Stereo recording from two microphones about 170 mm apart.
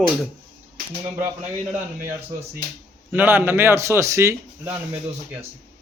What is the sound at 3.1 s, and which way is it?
A man's voice, 10° right (ahead or behind).